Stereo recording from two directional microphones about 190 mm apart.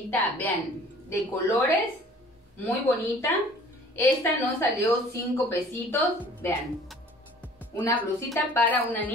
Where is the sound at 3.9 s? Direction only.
15° left (ahead or behind).